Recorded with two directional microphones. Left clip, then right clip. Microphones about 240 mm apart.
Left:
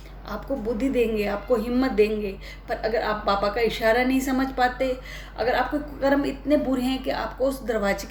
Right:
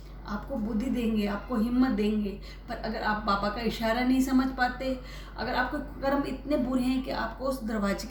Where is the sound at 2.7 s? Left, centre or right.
Left.